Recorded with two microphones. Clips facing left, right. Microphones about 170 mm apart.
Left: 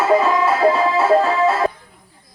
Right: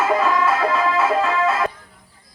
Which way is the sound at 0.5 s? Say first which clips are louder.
Left 4 dB; 30° left (ahead or behind).